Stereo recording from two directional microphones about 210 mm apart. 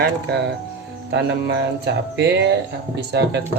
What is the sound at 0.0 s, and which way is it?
Speech, 50° right (ahead or behind).